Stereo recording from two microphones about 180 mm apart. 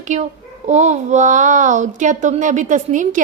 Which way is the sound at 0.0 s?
40° right (ahead or behind).